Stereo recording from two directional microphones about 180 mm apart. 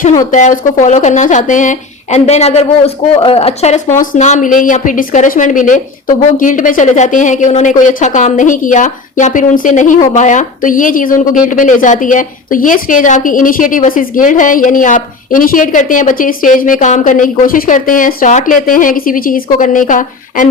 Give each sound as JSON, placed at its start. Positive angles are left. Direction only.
{"t": 0.3, "sound": "speech", "side_deg": 45}